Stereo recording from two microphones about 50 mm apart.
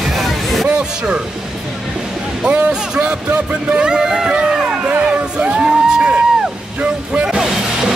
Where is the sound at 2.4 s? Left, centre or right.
Right.